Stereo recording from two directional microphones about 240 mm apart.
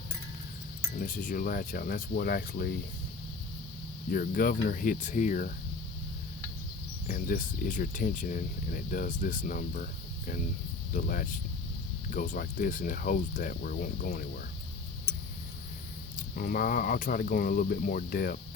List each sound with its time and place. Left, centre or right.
0.9 s speech: left
4.1 s speech: left
7.1 s speech: left
16.1 s speech: left